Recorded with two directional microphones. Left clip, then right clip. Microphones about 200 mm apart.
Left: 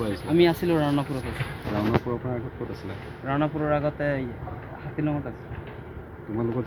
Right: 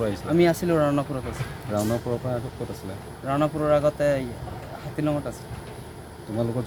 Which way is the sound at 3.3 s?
10° right (ahead or behind).